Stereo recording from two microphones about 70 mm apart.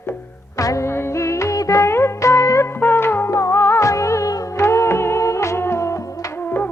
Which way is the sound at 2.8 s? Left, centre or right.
Left.